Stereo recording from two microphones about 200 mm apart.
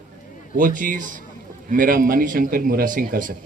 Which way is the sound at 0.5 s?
40° right (ahead or behind).